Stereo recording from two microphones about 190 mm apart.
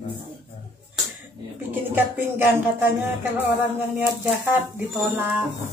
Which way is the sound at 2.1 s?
10° right (ahead or behind).